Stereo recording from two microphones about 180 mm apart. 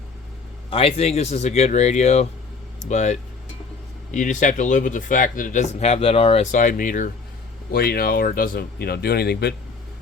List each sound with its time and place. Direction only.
0.7 s speech: 30° left (ahead or behind)
7.7 s speech: 60° left (ahead or behind)